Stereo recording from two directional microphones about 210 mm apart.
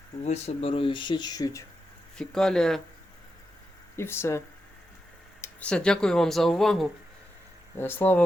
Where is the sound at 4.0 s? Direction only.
10° left (ahead or behind).